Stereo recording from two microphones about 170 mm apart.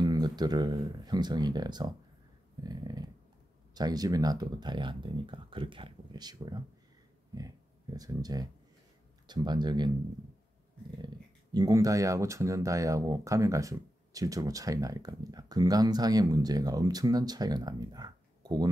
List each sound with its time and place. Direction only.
0.0 s speech: 25° right (ahead or behind)
2.6 s a sound: 25° right (ahead or behind)
3.7 s speech: 25° right (ahead or behind)
11.5 s speech: 20° right (ahead or behind)